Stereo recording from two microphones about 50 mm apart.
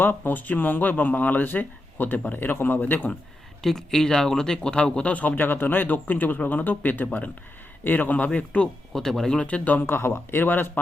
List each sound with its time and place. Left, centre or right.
0.0 s speech: left
3.6 s speech: centre
5.1 s speech: left
8.9 s speech: centre
9.4 s speech: left
9.8 s speech: left